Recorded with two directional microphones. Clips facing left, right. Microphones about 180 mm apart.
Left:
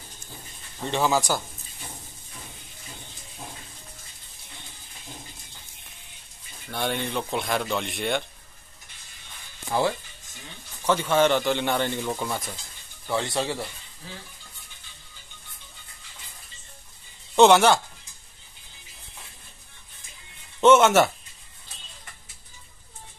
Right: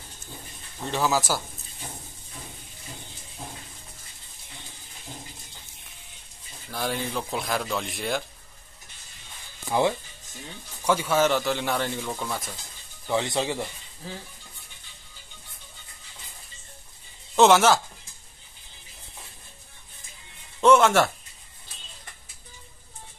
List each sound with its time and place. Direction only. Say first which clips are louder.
0.8 s a man's voice: left 1 dB; centre (ahead or behind)
6.7 s a man's voice: left 1 dB; centre (ahead or behind)
9.7 s a man's voice: right 1 dB; 15° right (ahead or behind); by 12.5 s centre (ahead or behind)
13.0 s speech: right 1 dB; 20° right (ahead or behind)
17.4 s a man's voice: left 1 dB; centre (ahead or behind)
20.6 s a man's voice: left 2 dB; centre (ahead or behind)